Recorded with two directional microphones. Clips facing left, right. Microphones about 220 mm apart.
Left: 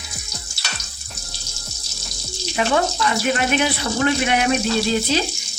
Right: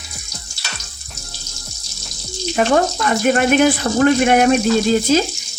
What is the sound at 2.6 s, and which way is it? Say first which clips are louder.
Speech: right 4 dB; 45° right (ahead or behind).